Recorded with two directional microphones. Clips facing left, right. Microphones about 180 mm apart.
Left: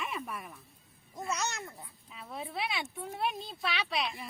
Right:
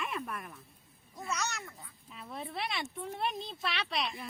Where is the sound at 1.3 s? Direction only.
25° left (ahead or behind).